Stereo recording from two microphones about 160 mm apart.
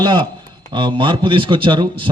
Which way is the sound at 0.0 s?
30° right (ahead or behind).